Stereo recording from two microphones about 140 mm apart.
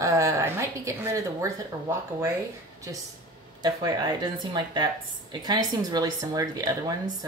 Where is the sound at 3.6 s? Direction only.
30° right (ahead or behind).